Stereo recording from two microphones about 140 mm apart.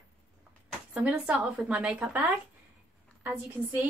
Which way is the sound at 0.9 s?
5° right (ahead or behind).